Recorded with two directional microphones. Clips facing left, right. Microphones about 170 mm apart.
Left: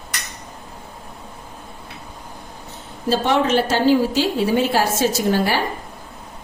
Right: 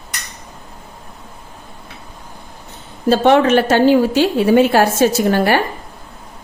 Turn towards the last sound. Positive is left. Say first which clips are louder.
# right 5 dB
turn(degrees=-60)  # may be behind; listen again after turning